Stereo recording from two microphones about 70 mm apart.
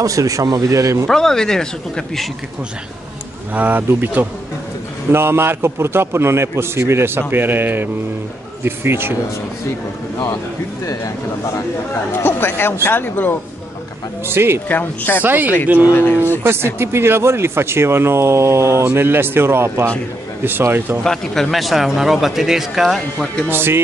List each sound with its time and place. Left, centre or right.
0.0 s speech: right
1.0 s speech: centre
3.5 s a man's voice: right
11.9 s speech: left
14.2 s a man's voice: right
14.7 s speech: left
15.2 s speech: right
15.9 s speech: left
16.4 s a man's voice: right
21.0 s speech: centre
23.5 s a man's voice: right